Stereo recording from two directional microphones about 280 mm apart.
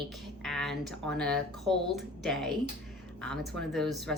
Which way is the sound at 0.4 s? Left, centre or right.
Centre.